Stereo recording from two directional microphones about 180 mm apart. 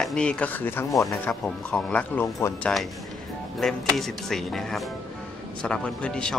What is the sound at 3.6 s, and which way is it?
Speech, centre (ahead or behind).